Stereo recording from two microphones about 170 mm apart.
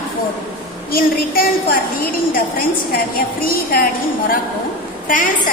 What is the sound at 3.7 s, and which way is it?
Speech, 60° left (ahead or behind).